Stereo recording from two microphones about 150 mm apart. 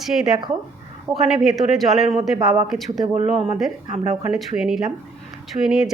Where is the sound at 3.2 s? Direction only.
45° right (ahead or behind).